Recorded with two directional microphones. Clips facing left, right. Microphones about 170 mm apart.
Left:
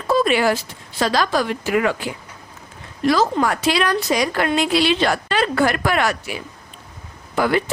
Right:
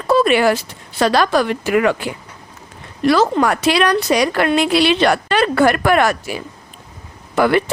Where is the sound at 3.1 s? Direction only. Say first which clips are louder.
Right 3 dB; 65° right (ahead or behind); by 6.4 s 45° right (ahead or behind).